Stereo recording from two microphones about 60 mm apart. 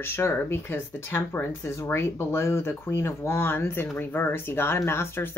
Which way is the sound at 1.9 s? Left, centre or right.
Left.